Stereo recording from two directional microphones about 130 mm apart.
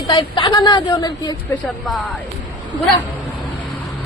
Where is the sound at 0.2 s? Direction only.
35° left (ahead or behind).